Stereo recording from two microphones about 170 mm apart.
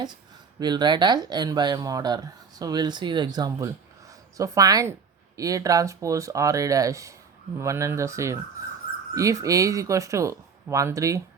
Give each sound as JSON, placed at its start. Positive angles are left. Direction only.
{"t": 0.6, "sound": "speech", "side_deg": -25}